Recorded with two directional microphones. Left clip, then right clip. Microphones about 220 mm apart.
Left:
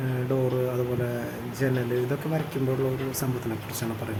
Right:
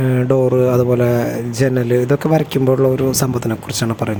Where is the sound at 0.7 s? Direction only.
35° right (ahead or behind).